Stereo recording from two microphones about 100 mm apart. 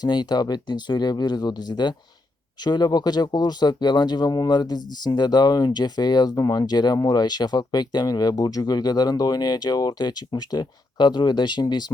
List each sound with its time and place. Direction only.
0.0 s speech: 45° left (ahead or behind)